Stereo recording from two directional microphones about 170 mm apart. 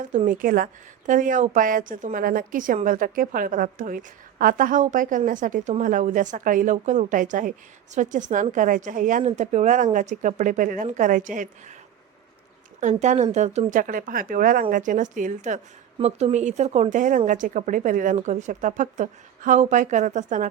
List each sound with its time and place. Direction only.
0.3 s speech: 55° right (ahead or behind)
12.8 s speech: 45° right (ahead or behind)